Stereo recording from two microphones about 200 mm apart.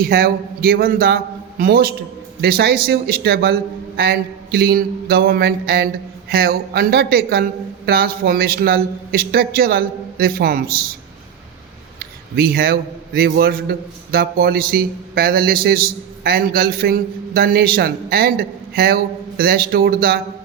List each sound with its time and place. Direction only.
0.0 s a man's voice: 50° right (ahead or behind)
11.9 s a man's voice: 50° right (ahead or behind)